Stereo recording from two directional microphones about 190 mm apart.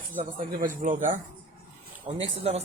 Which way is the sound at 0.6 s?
45° right (ahead or behind).